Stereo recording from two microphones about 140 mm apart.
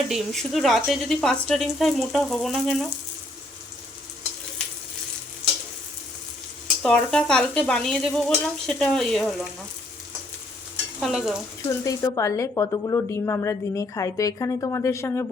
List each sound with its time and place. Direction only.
0.1 s speech: centre (ahead or behind)
6.8 s speech: 5° left (ahead or behind)
11.0 s speech: centre (ahead or behind)
11.9 s a woman's voice: 25° left (ahead or behind)